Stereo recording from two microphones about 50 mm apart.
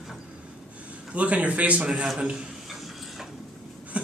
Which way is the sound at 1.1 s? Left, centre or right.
Right.